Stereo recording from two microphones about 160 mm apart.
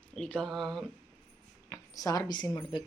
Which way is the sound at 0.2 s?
5° left (ahead or behind).